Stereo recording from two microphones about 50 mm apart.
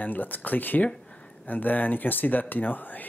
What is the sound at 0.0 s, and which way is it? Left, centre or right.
Speech, left.